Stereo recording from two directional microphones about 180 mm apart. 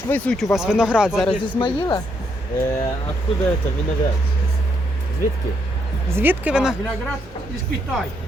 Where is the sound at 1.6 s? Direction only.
25° left (ahead or behind).